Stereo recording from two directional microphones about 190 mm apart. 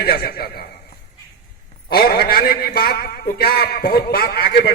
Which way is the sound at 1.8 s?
55° left (ahead or behind).